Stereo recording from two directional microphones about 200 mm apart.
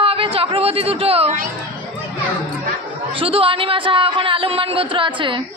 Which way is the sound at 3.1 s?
30° right (ahead or behind).